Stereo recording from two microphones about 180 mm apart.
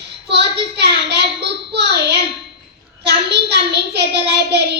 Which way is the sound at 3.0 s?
65° right (ahead or behind).